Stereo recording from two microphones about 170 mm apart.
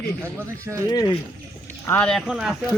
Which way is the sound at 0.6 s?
15° right (ahead or behind).